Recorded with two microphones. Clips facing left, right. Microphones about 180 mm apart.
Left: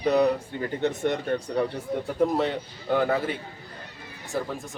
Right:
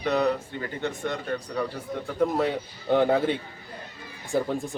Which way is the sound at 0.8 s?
20° left (ahead or behind).